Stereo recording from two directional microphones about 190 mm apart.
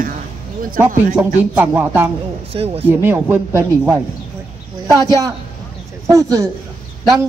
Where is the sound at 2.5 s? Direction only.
30° right (ahead or behind).